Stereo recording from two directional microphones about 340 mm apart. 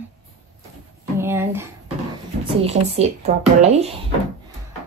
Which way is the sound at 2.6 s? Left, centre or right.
Centre.